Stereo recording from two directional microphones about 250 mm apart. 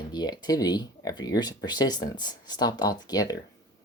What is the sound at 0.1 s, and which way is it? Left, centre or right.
Speech, centre.